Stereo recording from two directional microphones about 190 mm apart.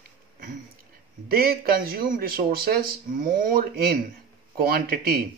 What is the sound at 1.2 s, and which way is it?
Speech, 50° right (ahead or behind).